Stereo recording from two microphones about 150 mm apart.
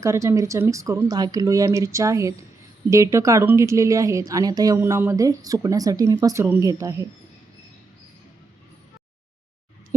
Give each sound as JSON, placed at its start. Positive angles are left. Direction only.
{"t": 0.0, "sound": "a woman's voice", "side_deg": -20}